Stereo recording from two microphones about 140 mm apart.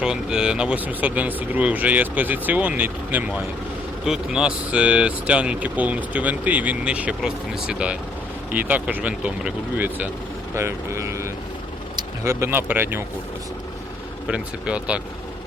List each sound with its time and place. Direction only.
0.0 s speech: 5° right (ahead or behind)
14.3 s speech: 10° right (ahead or behind)